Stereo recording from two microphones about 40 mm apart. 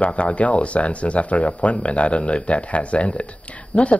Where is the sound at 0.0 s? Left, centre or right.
Left.